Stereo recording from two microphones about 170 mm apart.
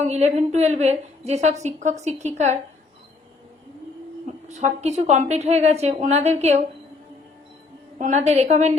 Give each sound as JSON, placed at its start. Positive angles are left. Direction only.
{"t": 0.0, "sound": "a woman's voice", "side_deg": -40}
{"t": 4.4, "sound": "a woman's voice", "side_deg": -40}
{"t": 7.9, "sound": "a woman's voice", "side_deg": -45}